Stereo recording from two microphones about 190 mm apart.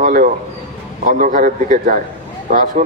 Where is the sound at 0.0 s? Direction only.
45° right (ahead or behind).